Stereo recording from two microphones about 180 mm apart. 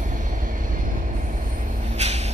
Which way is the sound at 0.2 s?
45° right (ahead or behind).